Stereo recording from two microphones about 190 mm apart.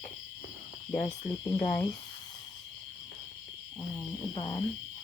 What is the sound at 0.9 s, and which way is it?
Speech, 40° left (ahead or behind).